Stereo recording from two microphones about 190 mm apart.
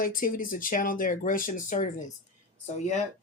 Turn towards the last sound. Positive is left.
turn(degrees=35)  # may be behind; listen again after turning